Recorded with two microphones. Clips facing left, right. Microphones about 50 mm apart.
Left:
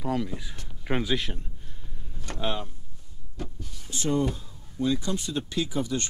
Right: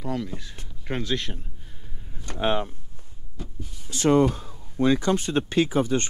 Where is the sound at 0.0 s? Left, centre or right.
Centre.